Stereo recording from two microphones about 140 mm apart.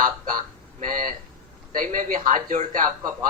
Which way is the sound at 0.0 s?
75° right (ahead or behind).